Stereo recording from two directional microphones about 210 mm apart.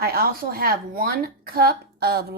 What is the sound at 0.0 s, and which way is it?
A woman's voice, 45° right (ahead or behind).